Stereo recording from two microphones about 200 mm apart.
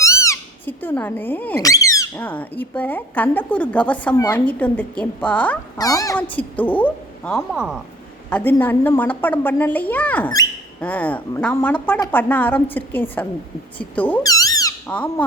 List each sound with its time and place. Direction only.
0.0 s a woman's voice: 15° left (ahead or behind)
5.7 s a woman's voice: 15° left (ahead or behind); by 7.8 s 5° right (ahead or behind)
8.3 s a woman's voice: 10° left (ahead or behind)
14.2 s squeak: 20° left (ahead or behind)
14.8 s squeak: 5° left (ahead or behind)